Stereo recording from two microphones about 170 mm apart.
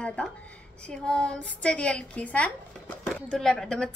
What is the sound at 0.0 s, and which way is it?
A woman's voice, 5° left (ahead or behind).